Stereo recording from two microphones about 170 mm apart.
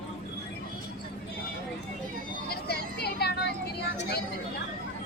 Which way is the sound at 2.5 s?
70° left (ahead or behind).